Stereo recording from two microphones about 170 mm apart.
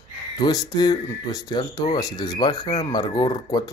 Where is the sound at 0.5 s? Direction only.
25° left (ahead or behind).